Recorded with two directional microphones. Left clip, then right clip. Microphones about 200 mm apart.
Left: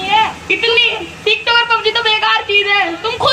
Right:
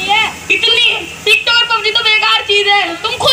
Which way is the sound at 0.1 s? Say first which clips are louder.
Even; 40° right (ahead or behind).